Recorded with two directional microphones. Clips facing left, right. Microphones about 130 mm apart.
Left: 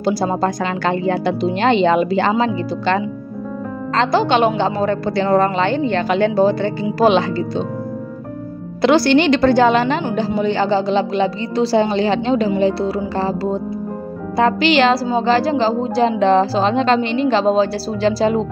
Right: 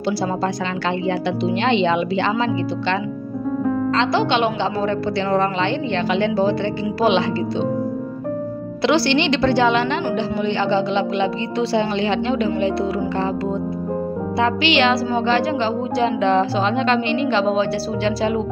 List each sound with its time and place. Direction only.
0.0 s speech: 45° left (ahead or behind)
8.8 s a woman's voice: 45° left (ahead or behind)